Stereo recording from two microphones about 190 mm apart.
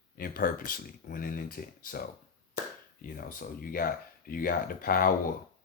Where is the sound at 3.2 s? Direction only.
50° left (ahead or behind).